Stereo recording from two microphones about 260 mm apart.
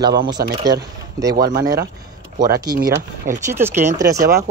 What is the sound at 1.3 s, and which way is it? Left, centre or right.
Speech, right.